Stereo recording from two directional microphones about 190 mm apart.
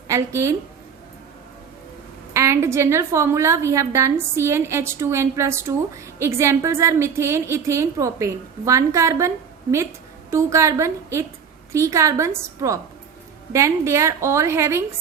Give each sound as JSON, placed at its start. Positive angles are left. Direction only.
{"t": 0.1, "sound": "a woman's voice", "side_deg": -15}
{"t": 2.3, "sound": "a woman's voice", "side_deg": -15}
{"t": 10.3, "sound": "a woman's voice", "side_deg": -15}